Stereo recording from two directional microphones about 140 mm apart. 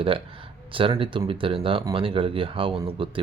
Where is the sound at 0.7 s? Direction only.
40° right (ahead or behind).